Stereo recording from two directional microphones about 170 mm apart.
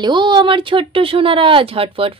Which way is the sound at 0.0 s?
25° right (ahead or behind).